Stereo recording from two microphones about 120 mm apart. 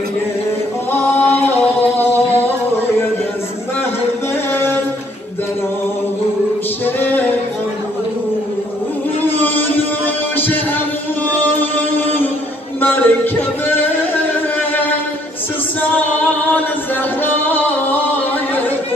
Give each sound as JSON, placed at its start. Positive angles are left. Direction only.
{"t": 0.9, "sound": "singing", "side_deg": 20}
{"t": 7.0, "sound": "a sound", "side_deg": 15}
{"t": 9.2, "sound": "music", "side_deg": 15}
{"t": 17.2, "sound": "music", "side_deg": 15}